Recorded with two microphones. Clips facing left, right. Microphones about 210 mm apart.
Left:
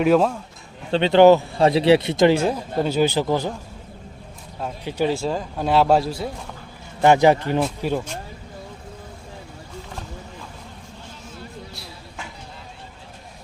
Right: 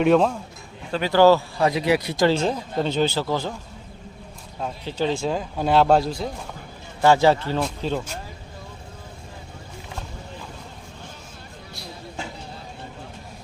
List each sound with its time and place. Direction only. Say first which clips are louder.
0.0 s speech: even; centre (ahead or behind)
0.9 s speech: left 3 dB; 25° left (ahead or behind)
4.9 s speech: left 2 dB; 10° left (ahead or behind)
7.0 s a man's voice: left 2 dB; 20° left (ahead or behind)